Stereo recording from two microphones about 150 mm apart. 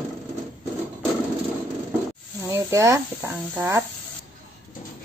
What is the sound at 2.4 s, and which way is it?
Speech, 20° right (ahead or behind).